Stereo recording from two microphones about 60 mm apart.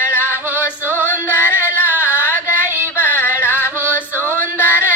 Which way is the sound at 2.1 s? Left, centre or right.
Left.